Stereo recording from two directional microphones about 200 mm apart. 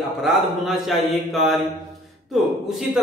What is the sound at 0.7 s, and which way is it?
Speech, centre (ahead or behind).